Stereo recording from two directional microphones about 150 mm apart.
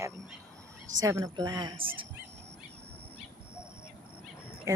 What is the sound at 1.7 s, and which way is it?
Speech, 35° right (ahead or behind).